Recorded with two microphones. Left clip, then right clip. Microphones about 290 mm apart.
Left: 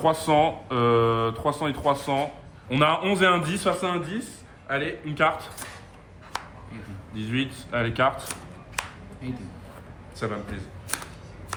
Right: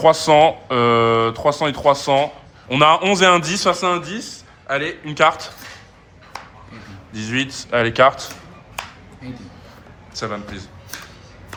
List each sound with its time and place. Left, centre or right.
0.0 s a man's voice: right
7.1 s a man's voice: right
10.2 s a man's voice: centre